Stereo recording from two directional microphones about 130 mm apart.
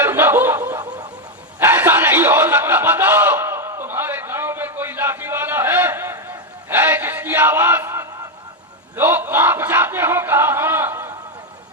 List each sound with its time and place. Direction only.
0.0 s snicker: 15° right (ahead or behind)
1.5 s chuckle: 15° right (ahead or behind)
9.0 s battle cry: 15° right (ahead or behind)